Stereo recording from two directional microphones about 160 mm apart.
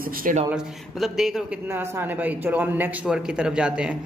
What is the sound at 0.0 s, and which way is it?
Speech, 60° right (ahead or behind).